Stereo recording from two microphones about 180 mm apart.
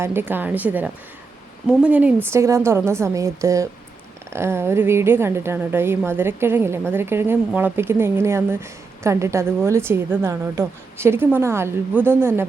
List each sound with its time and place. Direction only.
0.0 s a woman's voice: 10° right (ahead or behind)